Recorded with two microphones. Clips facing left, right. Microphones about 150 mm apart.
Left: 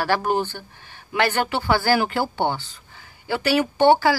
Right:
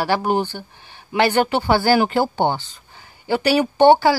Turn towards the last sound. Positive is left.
turn(degrees=-25)  # may be behind; listen again after turning